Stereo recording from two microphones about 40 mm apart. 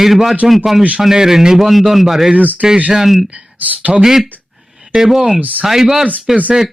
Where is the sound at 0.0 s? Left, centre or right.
Centre.